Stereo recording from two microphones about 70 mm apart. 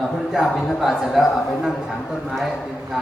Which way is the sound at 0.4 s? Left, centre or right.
Centre.